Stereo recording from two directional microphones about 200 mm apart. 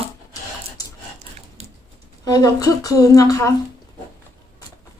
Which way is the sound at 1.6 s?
30° right (ahead or behind).